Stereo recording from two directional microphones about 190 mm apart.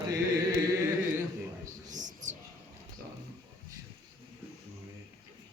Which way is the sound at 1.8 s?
40° right (ahead or behind).